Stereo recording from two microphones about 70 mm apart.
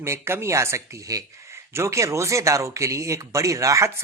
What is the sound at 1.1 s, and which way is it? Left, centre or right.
Speech, right.